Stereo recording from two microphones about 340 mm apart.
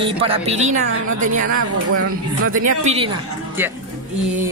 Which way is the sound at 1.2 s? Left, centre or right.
Right.